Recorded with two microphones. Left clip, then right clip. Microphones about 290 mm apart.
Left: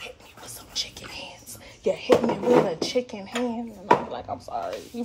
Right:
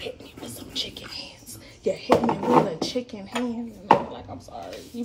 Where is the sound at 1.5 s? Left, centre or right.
Centre.